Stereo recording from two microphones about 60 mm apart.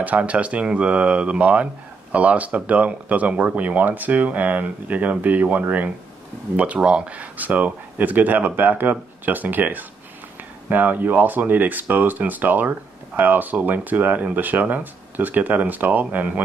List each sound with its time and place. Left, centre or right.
0.0 s speech: right